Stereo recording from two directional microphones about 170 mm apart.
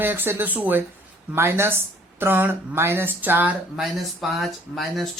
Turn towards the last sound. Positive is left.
turn(degrees=0)  # may be behind; listen again after turning